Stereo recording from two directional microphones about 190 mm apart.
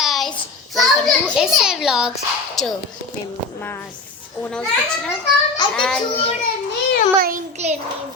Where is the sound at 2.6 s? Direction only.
Centre (ahead or behind).